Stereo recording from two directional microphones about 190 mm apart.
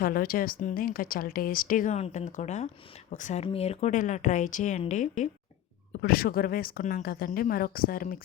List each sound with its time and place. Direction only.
0.0 s speech: 50° left (ahead or behind)
6.0 s speech: 55° left (ahead or behind)